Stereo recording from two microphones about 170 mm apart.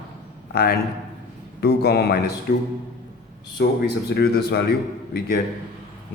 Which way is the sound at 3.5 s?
70° left (ahead or behind).